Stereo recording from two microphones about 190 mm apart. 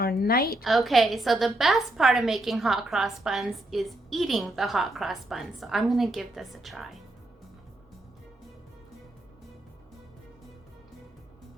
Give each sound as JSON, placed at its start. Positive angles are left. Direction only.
{"t": 0.0, "sound": "a woman's voice", "side_deg": 55}
{"t": 0.6, "sound": "a woman's voice", "side_deg": 0}